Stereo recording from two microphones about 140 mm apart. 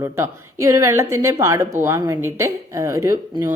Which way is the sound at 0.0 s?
20° right (ahead or behind).